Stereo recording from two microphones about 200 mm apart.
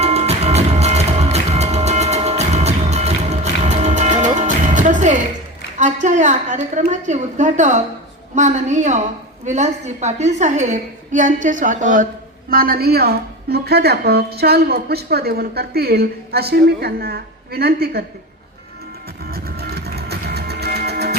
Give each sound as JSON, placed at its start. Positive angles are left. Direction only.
{"t": 0.0, "sound": "music", "side_deg": -30}
{"t": 5.7, "sound": "a woman's voice", "side_deg": -35}
{"t": 19.2, "sound": "music", "side_deg": -50}